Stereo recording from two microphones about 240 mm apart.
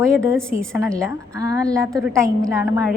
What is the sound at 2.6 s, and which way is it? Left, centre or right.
Speech, centre.